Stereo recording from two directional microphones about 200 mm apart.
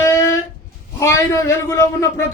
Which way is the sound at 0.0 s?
15° left (ahead or behind).